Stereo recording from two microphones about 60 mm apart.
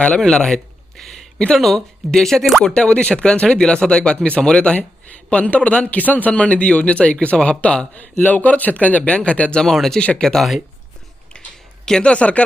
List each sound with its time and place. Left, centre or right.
0.2 s speech: centre
7.9 s speech: left; by 10.0 s centre
10.0 s speech: centre
10.2 s speech: centre
11.9 s speech: centre